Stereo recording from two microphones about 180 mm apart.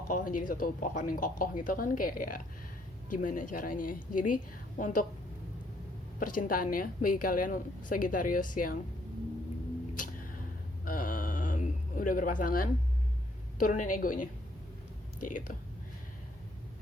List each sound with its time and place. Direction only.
0.1 s a woman's voice: 50° left (ahead or behind)
6.1 s a woman's voice: 50° left (ahead or behind)
9.9 s music: 45° left (ahead or behind)
10.8 s a sound: 50° left (ahead or behind)
13.6 s a woman's voice: 45° left (ahead or behind)